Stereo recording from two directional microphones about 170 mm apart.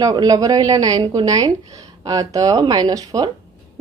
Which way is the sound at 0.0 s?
20° right (ahead or behind).